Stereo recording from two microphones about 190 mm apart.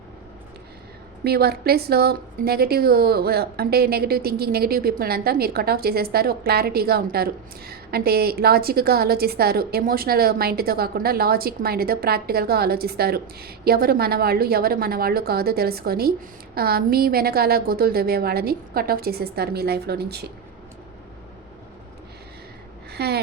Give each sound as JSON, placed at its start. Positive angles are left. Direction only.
{"t": 1.2, "sound": "a woman's voice", "side_deg": -55}
{"t": 22.9, "sound": "speech", "side_deg": -60}